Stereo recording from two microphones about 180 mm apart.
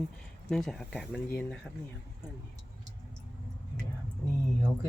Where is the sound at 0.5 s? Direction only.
5° left (ahead or behind).